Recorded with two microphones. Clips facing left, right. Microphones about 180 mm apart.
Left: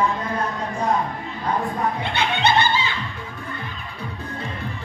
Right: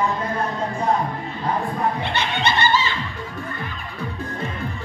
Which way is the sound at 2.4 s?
55° left (ahead or behind).